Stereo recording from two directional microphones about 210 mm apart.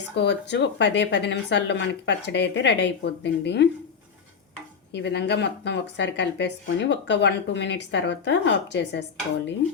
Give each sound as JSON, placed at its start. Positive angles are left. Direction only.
{"t": 0.1, "sound": "speech", "side_deg": 55}
{"t": 4.9, "sound": "speech", "side_deg": 55}